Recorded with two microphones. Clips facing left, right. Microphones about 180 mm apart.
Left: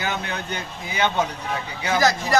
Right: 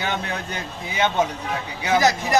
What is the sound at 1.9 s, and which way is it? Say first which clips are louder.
Speech: right 2 dB; 20° right (ahead or behind).